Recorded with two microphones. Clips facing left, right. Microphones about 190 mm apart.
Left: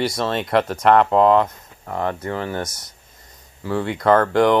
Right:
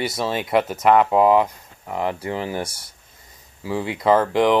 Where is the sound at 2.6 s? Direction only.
30° right (ahead or behind).